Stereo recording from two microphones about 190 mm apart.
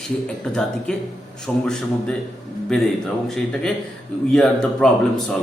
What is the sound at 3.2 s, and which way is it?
Speech, centre (ahead or behind).